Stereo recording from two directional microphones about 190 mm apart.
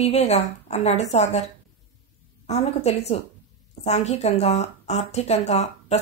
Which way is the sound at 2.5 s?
35° left (ahead or behind).